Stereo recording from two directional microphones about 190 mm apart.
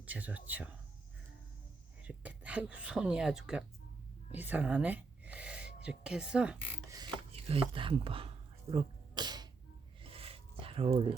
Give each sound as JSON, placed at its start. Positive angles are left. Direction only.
{"t": 0.0, "sound": "speech", "side_deg": -10}
{"t": 2.0, "sound": "speech", "side_deg": -5}
{"t": 7.4, "sound": "speech", "side_deg": -30}
{"t": 8.7, "sound": "sneeze", "side_deg": -25}
{"t": 10.0, "sound": "a sound", "side_deg": -30}